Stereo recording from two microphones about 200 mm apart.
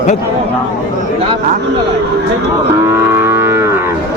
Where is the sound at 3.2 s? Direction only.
10° right (ahead or behind).